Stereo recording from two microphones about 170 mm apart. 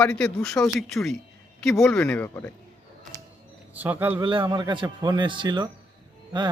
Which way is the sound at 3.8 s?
10° right (ahead or behind).